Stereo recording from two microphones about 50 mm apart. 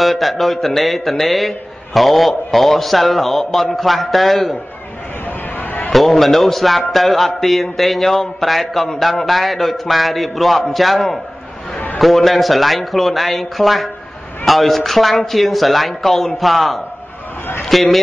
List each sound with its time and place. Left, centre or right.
0.0 s a man's voice: centre
5.2 s a sound: left
5.9 s a man's voice: centre